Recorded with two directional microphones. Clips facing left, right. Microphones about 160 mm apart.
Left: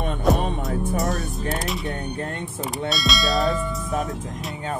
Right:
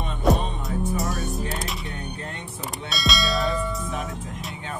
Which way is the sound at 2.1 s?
50° left (ahead or behind).